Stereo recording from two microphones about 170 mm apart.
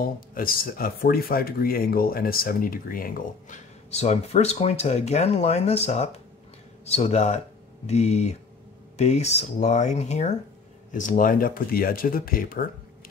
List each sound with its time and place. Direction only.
0.0 s speech: 60° left (ahead or behind)